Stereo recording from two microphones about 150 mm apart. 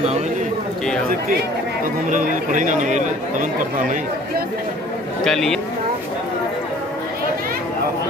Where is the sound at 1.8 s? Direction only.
60° right (ahead or behind).